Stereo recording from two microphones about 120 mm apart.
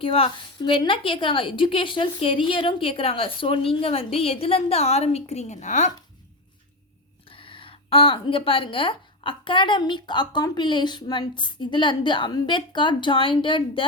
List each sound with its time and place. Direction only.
0.0 s a woman's voice: 50° left (ahead or behind); by 5.9 s 80° left
7.3 s a woman's voice: 50° left (ahead or behind)